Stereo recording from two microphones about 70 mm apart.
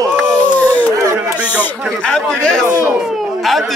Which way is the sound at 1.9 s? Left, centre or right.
Centre.